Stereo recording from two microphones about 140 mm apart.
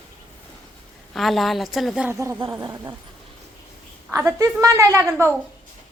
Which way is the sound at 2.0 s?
20° right (ahead or behind).